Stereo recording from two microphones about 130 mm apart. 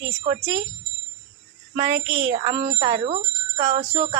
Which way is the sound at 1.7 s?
40° right (ahead or behind).